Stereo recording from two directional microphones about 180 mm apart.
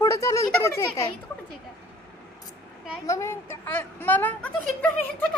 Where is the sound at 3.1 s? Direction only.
15° left (ahead or behind).